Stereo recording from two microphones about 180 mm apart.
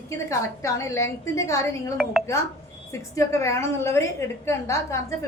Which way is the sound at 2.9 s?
15° left (ahead or behind).